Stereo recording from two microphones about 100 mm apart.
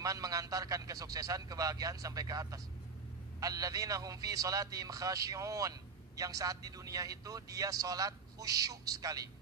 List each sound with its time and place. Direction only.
0.0 s speech: 35° right (ahead or behind)